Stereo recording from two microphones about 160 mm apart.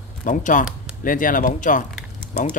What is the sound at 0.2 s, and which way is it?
Speech, 50° left (ahead or behind).